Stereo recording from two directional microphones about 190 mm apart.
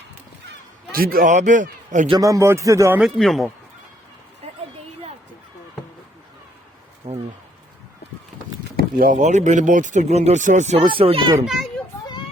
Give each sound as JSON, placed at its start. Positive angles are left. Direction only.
{"t": 0.9, "sound": "a man's voice", "side_deg": -50}
{"t": 2.0, "sound": "speech", "side_deg": -20}
{"t": 3.0, "sound": "speech", "side_deg": 0}
{"t": 7.1, "sound": "a sound", "side_deg": -20}
{"t": 9.0, "sound": "speech", "side_deg": -45}
{"t": 11.4, "sound": "a child's voice", "side_deg": 0}